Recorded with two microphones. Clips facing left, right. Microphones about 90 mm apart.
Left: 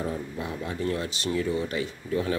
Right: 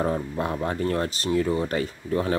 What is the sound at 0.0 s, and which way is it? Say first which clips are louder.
Speech: right 6 dB; 55° right (ahead or behind).